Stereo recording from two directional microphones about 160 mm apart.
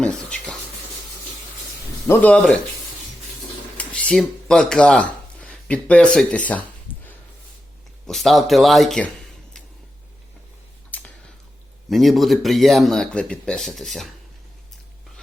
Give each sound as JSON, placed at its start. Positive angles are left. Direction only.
{"t": 0.0, "sound": "speech", "side_deg": 5}
{"t": 2.0, "sound": "speech", "side_deg": 5}
{"t": 3.8, "sound": "a sound", "side_deg": 5}
{"t": 8.0, "sound": "speech", "side_deg": 0}
{"t": 10.9, "sound": "a sound", "side_deg": 10}
{"t": 11.9, "sound": "speech", "side_deg": 0}